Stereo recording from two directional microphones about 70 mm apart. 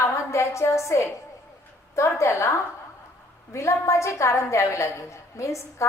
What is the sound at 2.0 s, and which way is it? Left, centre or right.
A woman's voice, left.